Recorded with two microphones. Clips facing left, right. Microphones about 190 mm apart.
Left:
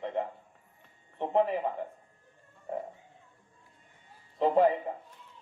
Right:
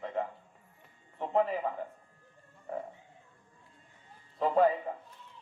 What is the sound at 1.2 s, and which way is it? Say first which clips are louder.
Speech: left 2 dB; 20° left (ahead or behind).